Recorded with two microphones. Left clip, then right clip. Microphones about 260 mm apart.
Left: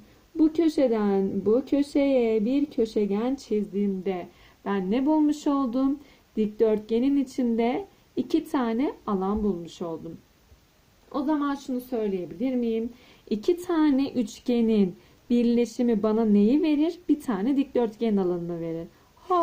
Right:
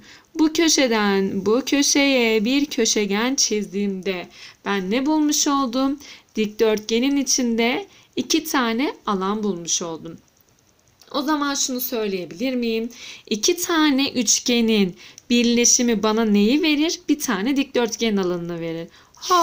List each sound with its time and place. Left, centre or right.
0.5 s speech: right
11.1 s speech: centre